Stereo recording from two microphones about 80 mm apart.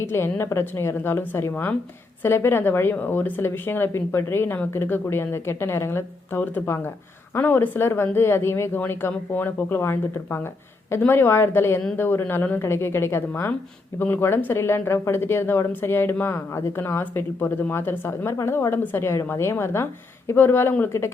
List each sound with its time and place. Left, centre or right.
0.0 s a woman's voice: left